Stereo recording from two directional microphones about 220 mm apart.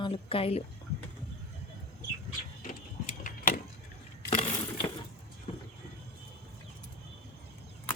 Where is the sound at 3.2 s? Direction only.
40° left (ahead or behind).